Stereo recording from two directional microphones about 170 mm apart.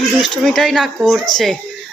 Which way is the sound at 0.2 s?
Centre (ahead or behind).